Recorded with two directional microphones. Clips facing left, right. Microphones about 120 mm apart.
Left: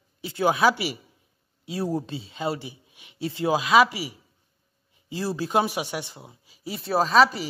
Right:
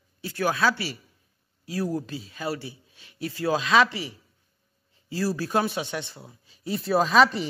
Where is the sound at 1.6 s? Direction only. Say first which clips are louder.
Left 1 dB; 25° left (ahead or behind).